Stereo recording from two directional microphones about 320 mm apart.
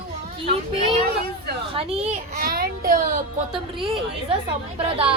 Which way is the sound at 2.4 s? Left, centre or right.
Right.